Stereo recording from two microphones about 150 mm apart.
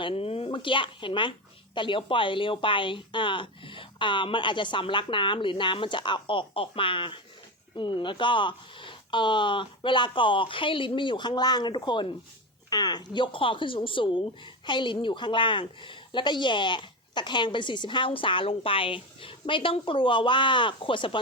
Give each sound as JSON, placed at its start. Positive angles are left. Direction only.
{"t": 0.0, "sound": "a woman's voice", "side_deg": 40}